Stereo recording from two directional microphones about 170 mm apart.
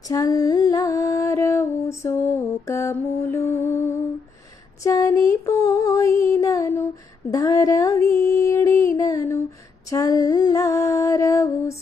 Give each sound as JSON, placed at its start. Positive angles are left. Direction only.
{"t": 0.1, "sound": "music", "side_deg": 20}
{"t": 2.6, "sound": "a sound", "side_deg": 15}
{"t": 9.9, "sound": "music", "side_deg": 20}